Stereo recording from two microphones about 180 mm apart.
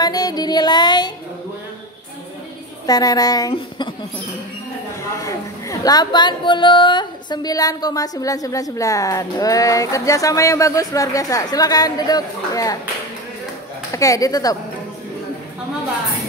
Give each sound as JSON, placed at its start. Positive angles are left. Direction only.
{"t": 0.0, "sound": "music", "side_deg": 20}
{"t": 2.9, "sound": "speech", "side_deg": 20}
{"t": 5.1, "sound": "speech", "side_deg": 20}
{"t": 13.9, "sound": "speech", "side_deg": 20}